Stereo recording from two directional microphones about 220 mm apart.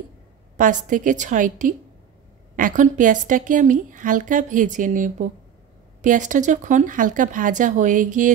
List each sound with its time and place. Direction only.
0.6 s a woman's voice: 35° right (ahead or behind)